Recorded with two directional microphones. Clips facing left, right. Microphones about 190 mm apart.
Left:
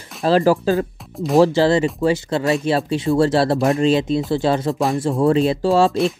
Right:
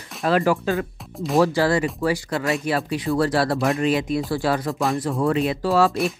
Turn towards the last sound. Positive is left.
turn(degrees=25)  # may be behind; listen again after turning